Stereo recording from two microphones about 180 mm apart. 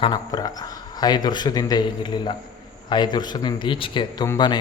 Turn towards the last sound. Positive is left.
turn(degrees=25)  # may be behind; listen again after turning